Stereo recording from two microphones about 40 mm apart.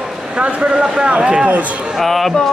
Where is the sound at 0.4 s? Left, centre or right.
Right.